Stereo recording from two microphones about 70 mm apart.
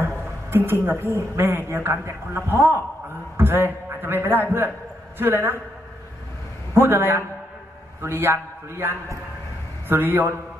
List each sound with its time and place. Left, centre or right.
0.5 s a woman's voice: right
6.7 s a woman's voice: right